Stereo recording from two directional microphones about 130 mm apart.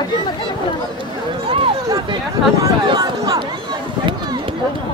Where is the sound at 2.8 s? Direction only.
30° right (ahead or behind).